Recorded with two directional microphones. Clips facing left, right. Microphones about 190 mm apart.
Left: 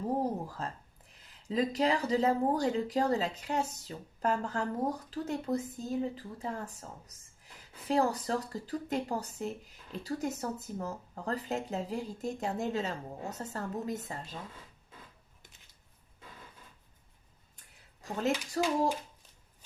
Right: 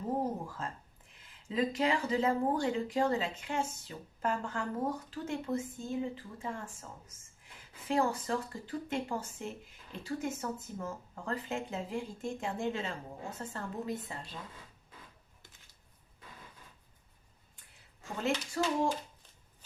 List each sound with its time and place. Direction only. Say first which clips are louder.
0.4 s a sound: left 2 dB; 35° left (ahead or behind)
1.2 s speech: left 2 dB; 35° left (ahead or behind)
7.9 s speech: left 2 dB; 35° left (ahead or behind)
18.6 s speech: left 2 dB; 40° left (ahead or behind)